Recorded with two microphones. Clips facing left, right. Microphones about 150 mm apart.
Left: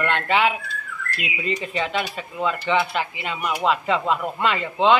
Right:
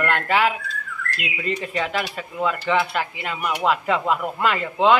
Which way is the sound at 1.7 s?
Centre (ahead or behind).